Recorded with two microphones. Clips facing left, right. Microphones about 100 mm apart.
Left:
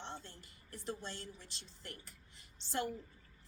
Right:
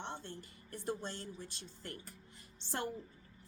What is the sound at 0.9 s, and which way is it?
Speech, 50° right (ahead or behind).